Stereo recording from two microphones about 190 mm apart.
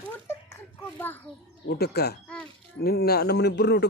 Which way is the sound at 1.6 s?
55° left (ahead or behind).